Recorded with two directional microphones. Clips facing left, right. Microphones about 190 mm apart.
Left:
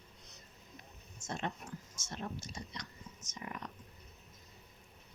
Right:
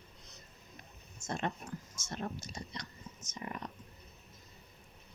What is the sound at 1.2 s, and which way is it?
Speech, 55° right (ahead or behind).